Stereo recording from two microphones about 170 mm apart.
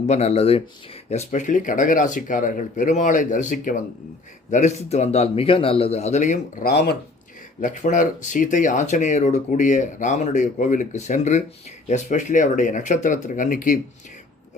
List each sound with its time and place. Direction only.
0.0 s speech: 40° left (ahead or behind)
6.7 s speech: 70° left (ahead or behind)
7.6 s speech: 50° left (ahead or behind)